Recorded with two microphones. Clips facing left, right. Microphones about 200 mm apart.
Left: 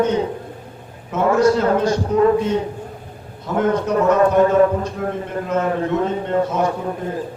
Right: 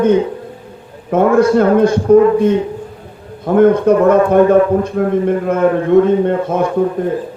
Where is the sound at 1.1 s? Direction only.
55° right (ahead or behind).